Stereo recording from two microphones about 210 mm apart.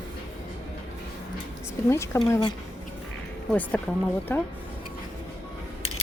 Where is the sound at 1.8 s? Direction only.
15° left (ahead or behind).